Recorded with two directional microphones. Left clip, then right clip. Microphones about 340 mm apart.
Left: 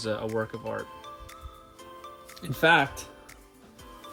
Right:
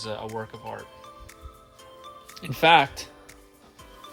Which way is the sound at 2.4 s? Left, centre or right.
Centre.